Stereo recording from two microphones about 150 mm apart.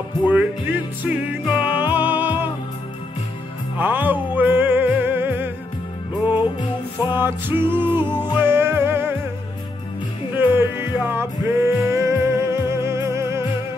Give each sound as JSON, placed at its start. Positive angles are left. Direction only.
{"t": 0.3, "sound": "music", "side_deg": -10}
{"t": 1.4, "sound": "music", "side_deg": 30}
{"t": 1.9, "sound": "music", "side_deg": -15}
{"t": 3.7, "sound": "music", "side_deg": -10}
{"t": 6.3, "sound": "music", "side_deg": 30}
{"t": 7.2, "sound": "music", "side_deg": -15}
{"t": 10.3, "sound": "music", "side_deg": -15}